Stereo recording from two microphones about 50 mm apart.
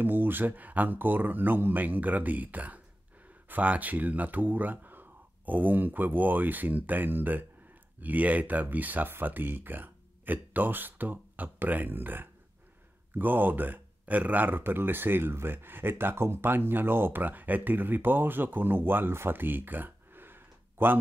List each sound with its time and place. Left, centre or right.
0.0 s speech: right